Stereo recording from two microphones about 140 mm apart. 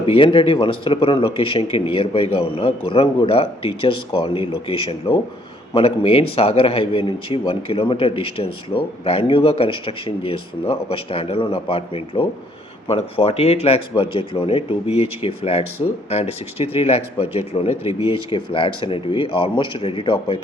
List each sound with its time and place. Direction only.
0.0 s a man's voice: 40° left (ahead or behind)